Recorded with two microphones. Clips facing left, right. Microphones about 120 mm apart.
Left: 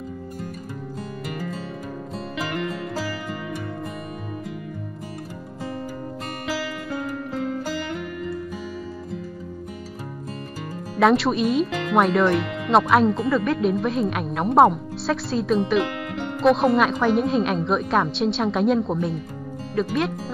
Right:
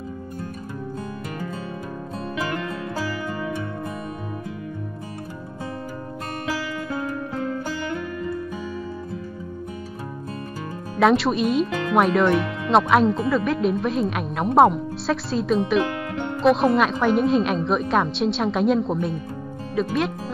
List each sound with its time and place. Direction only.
11.0 s speech: centre (ahead or behind)